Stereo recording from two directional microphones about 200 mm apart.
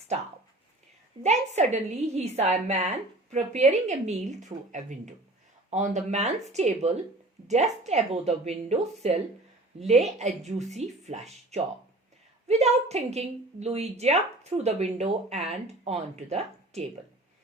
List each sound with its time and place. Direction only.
1.2 s a woman's voice: 35° right (ahead or behind)